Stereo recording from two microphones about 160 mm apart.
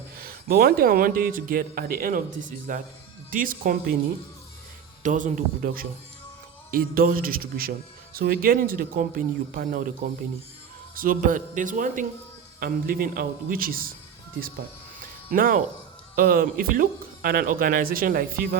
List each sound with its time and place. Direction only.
0.2 s a man's voice: 70° right (ahead or behind)
5.0 s a man's voice: 55° right (ahead or behind)
10.9 s a man's voice: 60° right (ahead or behind)
15.3 s a man's voice: 60° right (ahead or behind)